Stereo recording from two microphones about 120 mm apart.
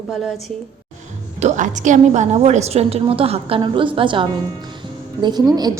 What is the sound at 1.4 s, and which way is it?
A woman's voice, 90° right.